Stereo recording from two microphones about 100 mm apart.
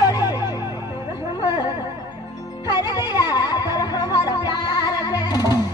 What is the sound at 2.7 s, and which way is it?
Music, 45° left (ahead or behind).